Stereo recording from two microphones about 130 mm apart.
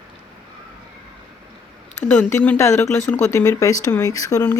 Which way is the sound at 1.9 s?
15° left (ahead or behind).